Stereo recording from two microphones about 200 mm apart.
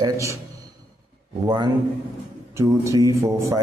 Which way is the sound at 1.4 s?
20° right (ahead or behind).